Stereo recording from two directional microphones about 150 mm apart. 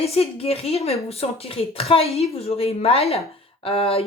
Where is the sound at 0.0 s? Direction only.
40° left (ahead or behind).